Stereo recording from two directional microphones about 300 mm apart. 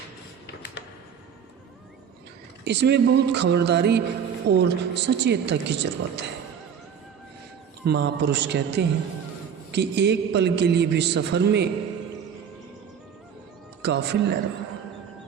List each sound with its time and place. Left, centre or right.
0.4 s a sound: left
2.6 s a man's voice: right
7.9 s a man's voice: right
13.8 s a man's voice: right